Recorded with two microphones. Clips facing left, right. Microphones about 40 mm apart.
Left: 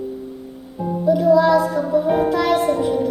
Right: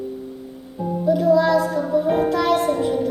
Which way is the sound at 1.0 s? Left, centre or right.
Centre.